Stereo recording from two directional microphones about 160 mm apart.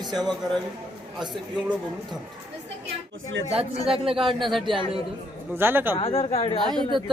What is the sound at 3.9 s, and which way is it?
Speech, 35° right (ahead or behind).